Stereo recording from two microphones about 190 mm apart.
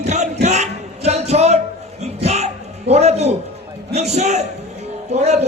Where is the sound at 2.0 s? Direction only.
35° right (ahead or behind).